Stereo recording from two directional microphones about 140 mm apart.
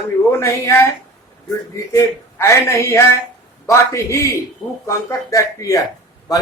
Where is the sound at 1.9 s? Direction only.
20° left (ahead or behind).